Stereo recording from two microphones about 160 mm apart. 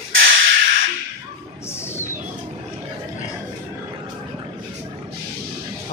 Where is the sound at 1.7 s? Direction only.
15° left (ahead or behind).